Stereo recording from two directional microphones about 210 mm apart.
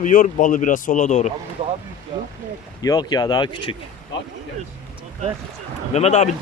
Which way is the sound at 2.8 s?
20° left (ahead or behind).